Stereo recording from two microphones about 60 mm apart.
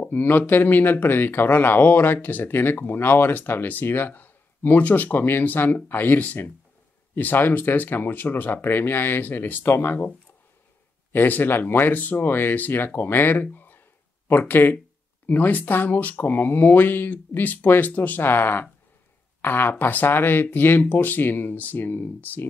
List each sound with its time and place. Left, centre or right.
0.0 s speech: left